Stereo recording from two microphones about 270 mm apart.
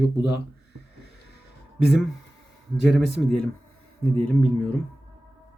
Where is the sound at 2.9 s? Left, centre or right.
Centre.